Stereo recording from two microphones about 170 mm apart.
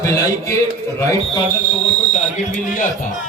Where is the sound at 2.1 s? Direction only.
50° left (ahead or behind).